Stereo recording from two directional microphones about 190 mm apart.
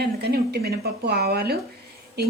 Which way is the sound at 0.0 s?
60° right (ahead or behind).